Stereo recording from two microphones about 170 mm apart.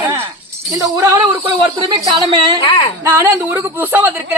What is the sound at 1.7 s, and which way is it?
Speech, 30° right (ahead or behind).